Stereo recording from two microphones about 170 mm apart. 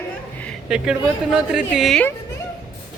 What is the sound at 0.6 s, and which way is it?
A woman's voice, 5° right (ahead or behind).